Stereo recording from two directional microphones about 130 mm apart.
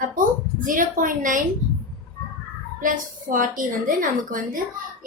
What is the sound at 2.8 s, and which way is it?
A woman's voice, 90° right.